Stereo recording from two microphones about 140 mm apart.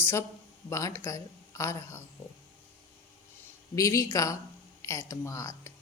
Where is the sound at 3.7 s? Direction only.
25° left (ahead or behind).